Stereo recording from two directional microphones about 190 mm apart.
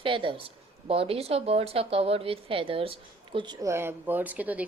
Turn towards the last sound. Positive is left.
turn(degrees=-10)  # may be behind; listen again after turning